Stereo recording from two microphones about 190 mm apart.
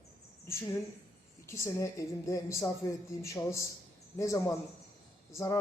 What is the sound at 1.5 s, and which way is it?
Speech, 15° left (ahead or behind).